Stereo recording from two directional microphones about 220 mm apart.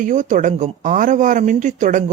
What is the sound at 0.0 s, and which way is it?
Speech, 35° right (ahead or behind).